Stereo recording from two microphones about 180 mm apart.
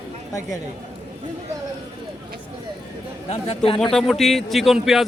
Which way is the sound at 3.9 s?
Centre (ahead or behind).